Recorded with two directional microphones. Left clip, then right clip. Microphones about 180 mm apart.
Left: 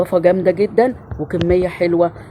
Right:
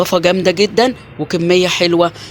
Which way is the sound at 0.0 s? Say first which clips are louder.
Right 1 dB; 25° right (ahead or behind).